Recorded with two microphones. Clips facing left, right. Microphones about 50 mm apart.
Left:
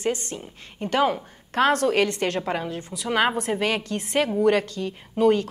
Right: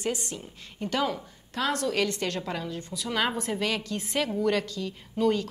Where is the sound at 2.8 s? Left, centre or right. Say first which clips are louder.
Left 2 dB; centre.